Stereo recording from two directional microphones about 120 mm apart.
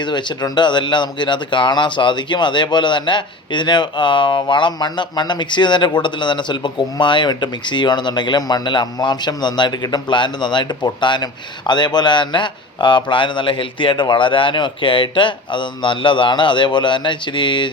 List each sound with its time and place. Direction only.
0.0 s speech: 40° left (ahead or behind)